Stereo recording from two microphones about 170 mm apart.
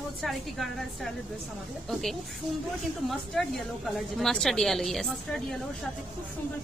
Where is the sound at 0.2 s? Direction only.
Centre (ahead or behind).